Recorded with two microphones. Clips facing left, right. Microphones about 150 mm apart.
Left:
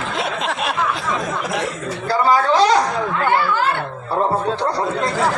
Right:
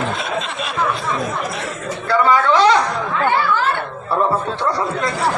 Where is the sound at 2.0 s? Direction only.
35° left (ahead or behind).